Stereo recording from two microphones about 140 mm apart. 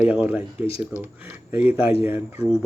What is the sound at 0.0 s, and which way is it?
Speech, 15° right (ahead or behind).